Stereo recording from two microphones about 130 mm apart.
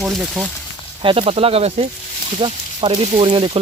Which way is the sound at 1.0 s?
45° right (ahead or behind).